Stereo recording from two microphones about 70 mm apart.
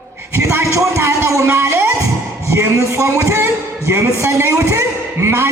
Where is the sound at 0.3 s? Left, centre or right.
Right.